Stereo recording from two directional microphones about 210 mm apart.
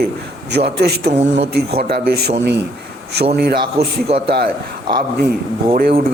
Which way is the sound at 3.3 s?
50° right (ahead or behind).